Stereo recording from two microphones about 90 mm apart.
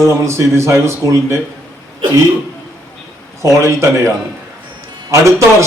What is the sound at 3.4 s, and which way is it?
Speech, 35° right (ahead or behind).